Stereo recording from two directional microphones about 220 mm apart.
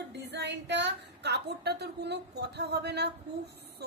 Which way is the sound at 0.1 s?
50° right (ahead or behind).